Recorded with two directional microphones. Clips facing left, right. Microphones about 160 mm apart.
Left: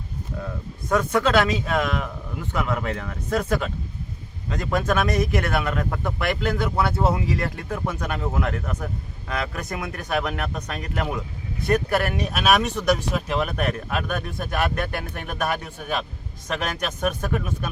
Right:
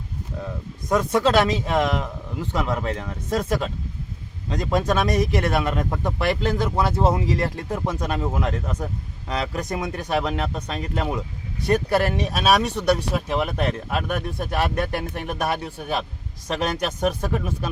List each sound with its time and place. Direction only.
0.9 s speech: 20° right (ahead or behind)
1.2 s speech: 30° right (ahead or behind)
4.6 s speech: 15° right (ahead or behind)
4.9 s speech: 30° right (ahead or behind)